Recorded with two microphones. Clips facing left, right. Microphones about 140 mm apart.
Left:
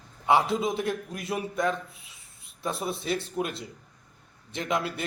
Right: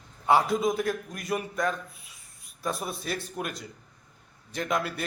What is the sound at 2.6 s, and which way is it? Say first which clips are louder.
A man's voice: left 1 dB; 25° left (ahead or behind).